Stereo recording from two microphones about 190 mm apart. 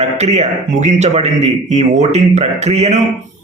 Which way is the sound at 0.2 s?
35° right (ahead or behind).